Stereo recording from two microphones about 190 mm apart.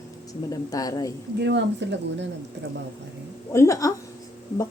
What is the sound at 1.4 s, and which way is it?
Speech, 70° right (ahead or behind).